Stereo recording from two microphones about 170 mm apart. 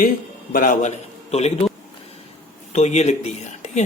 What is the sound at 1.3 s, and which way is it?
Speech, 40° left (ahead or behind).